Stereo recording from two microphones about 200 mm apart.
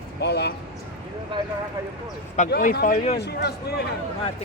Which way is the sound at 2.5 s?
50° left (ahead or behind).